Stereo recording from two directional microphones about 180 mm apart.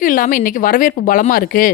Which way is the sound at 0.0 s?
50° left (ahead or behind).